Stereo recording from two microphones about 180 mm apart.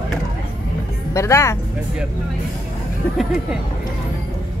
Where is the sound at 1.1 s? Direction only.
15° left (ahead or behind).